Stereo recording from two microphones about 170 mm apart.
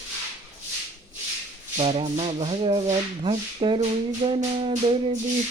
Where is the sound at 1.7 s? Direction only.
35° right (ahead or behind).